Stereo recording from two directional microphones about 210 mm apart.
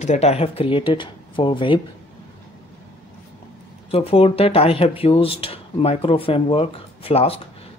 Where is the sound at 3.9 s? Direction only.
30° left (ahead or behind).